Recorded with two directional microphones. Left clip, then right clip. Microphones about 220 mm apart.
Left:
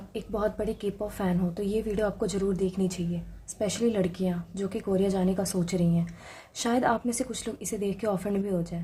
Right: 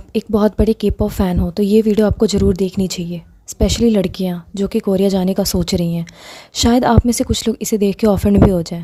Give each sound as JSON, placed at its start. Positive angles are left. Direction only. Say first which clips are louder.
{"t": 0.1, "sound": "a woman's voice", "louder": "right 13 dB", "side_deg": -45}